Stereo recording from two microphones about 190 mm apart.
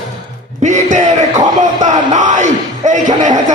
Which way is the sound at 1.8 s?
40° right (ahead or behind).